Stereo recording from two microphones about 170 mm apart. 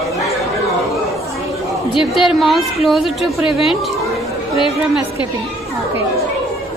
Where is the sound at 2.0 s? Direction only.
5° right (ahead or behind).